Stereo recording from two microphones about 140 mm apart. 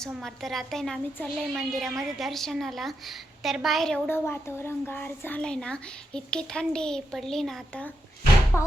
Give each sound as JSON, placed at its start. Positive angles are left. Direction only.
{"t": 0.1, "sound": "a woman's voice", "side_deg": 0}
{"t": 4.0, "sound": "a woman's voice", "side_deg": 15}
{"t": 8.5, "sound": "a woman's voice", "side_deg": 20}